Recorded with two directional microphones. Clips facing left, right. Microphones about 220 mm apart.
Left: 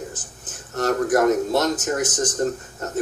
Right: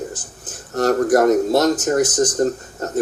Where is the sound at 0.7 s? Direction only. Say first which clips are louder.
Right 4 dB; 35° right (ahead or behind).